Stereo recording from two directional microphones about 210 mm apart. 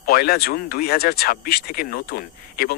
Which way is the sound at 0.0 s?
45° left (ahead or behind).